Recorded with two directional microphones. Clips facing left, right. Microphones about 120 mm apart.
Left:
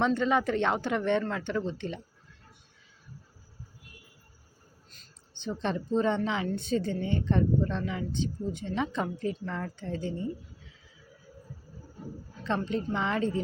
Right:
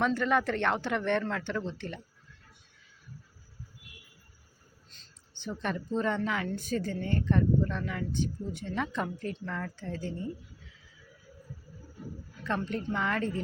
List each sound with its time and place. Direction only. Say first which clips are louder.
0.0 s speech: left 2 dB; 20° left (ahead or behind)
1.2 s speech: left 1 dB; 5° left (ahead or behind)
1.6 s speech: left 3 dB; 15° left (ahead or behind)
5.4 s a woman's voice: left 3 dB; 25° left (ahead or behind)
11.9 s speech: left 1 dB; 25° left (ahead or behind)